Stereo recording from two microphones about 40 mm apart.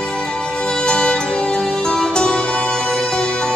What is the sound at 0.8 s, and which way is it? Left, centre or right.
Music, left.